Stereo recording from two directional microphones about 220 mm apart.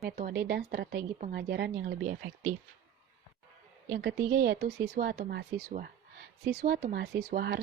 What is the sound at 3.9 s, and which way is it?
Speech, 50° right (ahead or behind).